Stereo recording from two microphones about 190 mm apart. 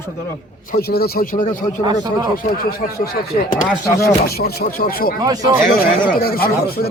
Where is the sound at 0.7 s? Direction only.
55° left (ahead or behind).